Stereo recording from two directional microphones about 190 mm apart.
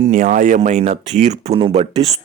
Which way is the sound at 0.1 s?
40° right (ahead or behind).